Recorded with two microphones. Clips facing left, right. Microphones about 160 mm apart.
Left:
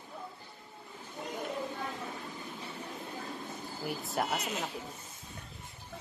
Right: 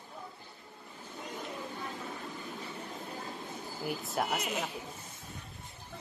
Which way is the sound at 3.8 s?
Centre (ahead or behind).